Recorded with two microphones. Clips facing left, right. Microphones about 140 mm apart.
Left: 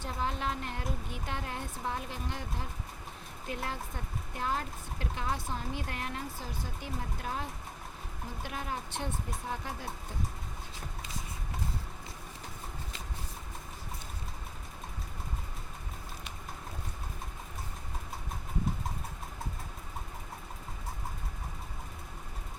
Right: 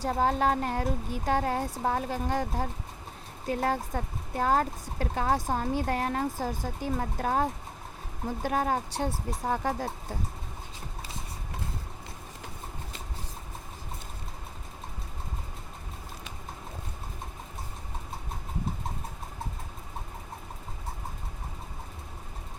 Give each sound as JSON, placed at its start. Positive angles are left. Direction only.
{"t": 0.0, "sound": "a woman's voice", "side_deg": -40}
{"t": 6.9, "sound": "speech", "side_deg": -60}
{"t": 8.4, "sound": "a woman's voice", "side_deg": -45}
{"t": 9.5, "sound": "speech", "side_deg": -55}